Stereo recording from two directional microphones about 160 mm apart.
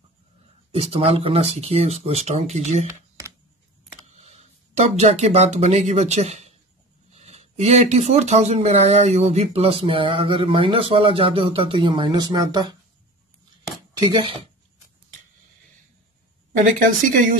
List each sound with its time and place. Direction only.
0.7 s speech: 35° right (ahead or behind)
4.0 s speech: 40° right (ahead or behind)
13.9 s speech: 30° right (ahead or behind)